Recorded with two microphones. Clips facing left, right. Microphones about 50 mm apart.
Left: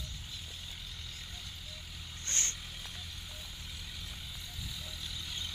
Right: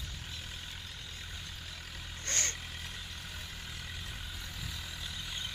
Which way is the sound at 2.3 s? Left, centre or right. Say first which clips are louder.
Right 3 dB; right.